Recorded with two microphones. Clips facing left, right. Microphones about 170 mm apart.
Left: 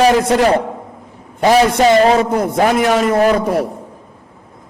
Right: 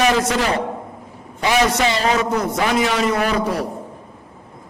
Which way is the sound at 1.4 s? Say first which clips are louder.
Left 7 dB; 50° left (ahead or behind).